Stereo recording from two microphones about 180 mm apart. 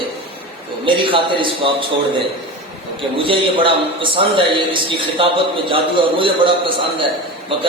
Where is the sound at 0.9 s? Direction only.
30° right (ahead or behind).